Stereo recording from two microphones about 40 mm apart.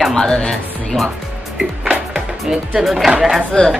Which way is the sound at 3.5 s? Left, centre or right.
Centre.